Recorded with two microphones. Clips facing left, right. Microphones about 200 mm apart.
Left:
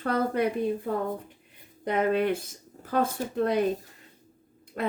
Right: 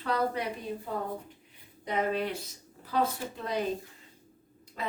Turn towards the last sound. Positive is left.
turn(degrees=55)  # may be behind; listen again after turning